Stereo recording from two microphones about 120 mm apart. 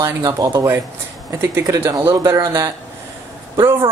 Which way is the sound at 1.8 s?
20° right (ahead or behind).